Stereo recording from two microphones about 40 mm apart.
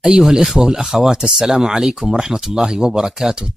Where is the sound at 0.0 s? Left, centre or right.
Centre.